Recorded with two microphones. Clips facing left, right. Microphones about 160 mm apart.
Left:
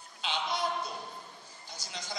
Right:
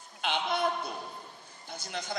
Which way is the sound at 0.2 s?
55° right (ahead or behind).